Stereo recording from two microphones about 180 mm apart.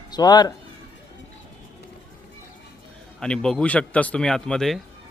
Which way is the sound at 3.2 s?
5° left (ahead or behind).